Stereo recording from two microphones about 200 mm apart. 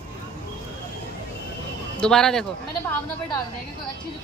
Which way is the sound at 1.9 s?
5° left (ahead or behind).